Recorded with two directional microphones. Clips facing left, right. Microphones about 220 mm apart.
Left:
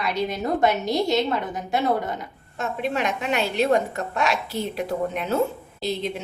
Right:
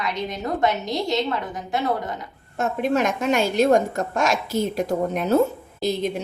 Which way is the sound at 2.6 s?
45° right (ahead or behind).